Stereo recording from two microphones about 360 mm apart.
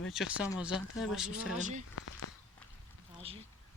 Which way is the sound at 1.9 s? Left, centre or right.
Left.